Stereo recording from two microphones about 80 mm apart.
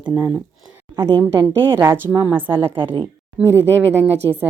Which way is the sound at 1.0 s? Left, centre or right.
Right.